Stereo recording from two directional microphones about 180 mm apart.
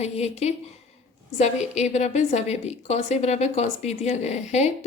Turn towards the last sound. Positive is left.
turn(degrees=40)  # may be behind; listen again after turning